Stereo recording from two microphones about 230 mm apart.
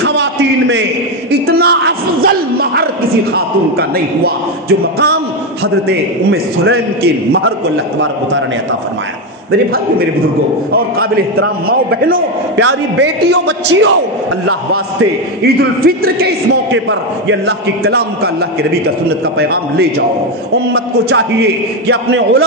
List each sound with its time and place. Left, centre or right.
0.0 s a sound: right
3.3 s speech: right
5.6 s a man's voice: right
12.1 s a man's voice: right
14.5 s speech: right
15.4 s speech: right
17.3 s a man's voice: right